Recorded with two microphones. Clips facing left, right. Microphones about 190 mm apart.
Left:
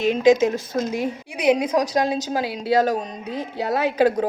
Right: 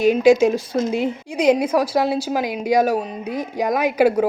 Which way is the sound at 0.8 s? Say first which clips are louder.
Right 1 dB; 20° right (ahead or behind).